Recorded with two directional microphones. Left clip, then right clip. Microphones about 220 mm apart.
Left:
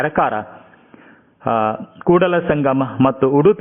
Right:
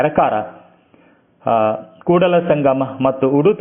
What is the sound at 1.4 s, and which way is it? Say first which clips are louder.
A man's voice: right 2 dB; 20° left (ahead or behind).